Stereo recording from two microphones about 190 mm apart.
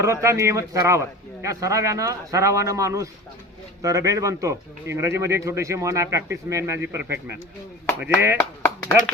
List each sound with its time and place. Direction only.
0.0 s a man's voice: 15° right (ahead or behind)
8.4 s speech: 10° left (ahead or behind)